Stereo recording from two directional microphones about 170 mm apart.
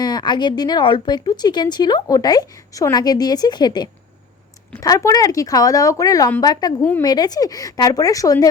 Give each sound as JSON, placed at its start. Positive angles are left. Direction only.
{"t": 0.0, "sound": "speech", "side_deg": 25}